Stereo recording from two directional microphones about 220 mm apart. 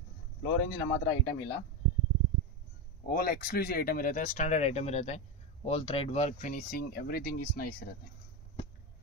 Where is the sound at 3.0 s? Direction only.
45° left (ahead or behind).